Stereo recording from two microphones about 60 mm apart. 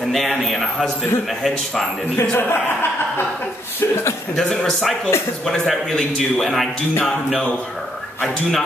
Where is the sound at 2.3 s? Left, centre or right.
Left.